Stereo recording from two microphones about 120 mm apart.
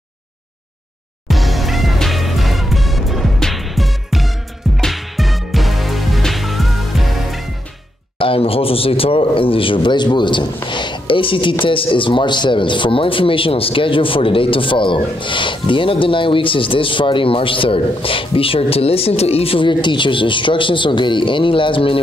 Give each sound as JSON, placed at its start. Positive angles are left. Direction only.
{"t": 1.3, "sound": "music", "side_deg": 0}
{"t": 8.2, "sound": "speech", "side_deg": 50}